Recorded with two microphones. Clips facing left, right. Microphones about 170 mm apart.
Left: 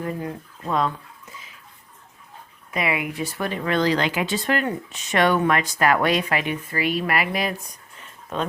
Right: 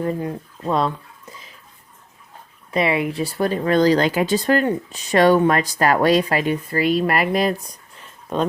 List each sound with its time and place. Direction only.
0.0 s speech: 30° right (ahead or behind)
1.3 s bathtub: 40° right (ahead or behind)
2.7 s speech: 35° right (ahead or behind)